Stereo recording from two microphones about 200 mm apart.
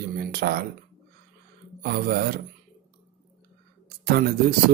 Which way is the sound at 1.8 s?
50° right (ahead or behind).